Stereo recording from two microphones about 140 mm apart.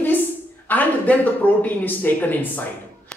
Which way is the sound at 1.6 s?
15° left (ahead or behind).